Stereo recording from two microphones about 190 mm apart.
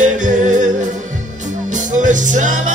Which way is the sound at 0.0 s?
40° right (ahead or behind).